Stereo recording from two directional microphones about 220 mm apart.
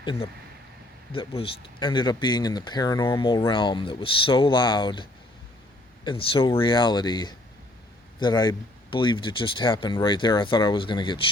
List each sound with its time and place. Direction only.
0.0 s speech: 20° left (ahead or behind)
6.1 s speech: 25° left (ahead or behind)